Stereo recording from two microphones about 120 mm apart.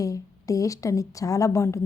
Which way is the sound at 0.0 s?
30° left (ahead or behind).